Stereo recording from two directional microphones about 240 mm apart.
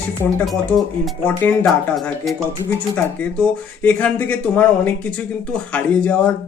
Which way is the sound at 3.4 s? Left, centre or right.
Centre.